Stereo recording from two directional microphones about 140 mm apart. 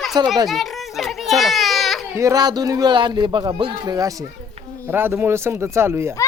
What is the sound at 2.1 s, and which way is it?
Speech, 25° right (ahead or behind).